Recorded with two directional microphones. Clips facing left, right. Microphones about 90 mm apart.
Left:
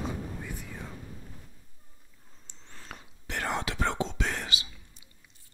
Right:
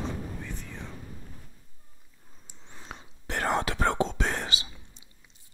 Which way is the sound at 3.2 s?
40° right (ahead or behind).